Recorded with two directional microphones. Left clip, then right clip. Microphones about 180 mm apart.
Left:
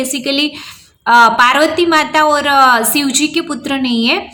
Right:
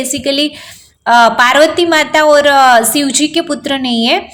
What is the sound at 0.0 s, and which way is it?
A woman's voice, 10° right (ahead or behind).